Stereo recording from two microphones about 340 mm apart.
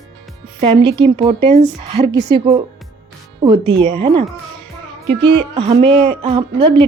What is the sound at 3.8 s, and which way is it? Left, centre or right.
Speech, centre.